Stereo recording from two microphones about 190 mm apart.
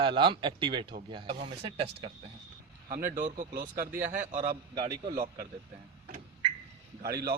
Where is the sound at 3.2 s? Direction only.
40° right (ahead or behind).